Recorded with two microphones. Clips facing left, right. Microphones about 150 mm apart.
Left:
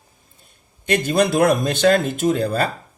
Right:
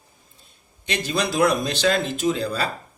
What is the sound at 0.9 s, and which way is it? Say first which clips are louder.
A man's voice: left 7 dB; 50° left (ahead or behind).